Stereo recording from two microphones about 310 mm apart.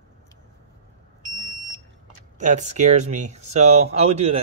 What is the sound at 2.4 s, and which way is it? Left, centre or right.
Speech, right.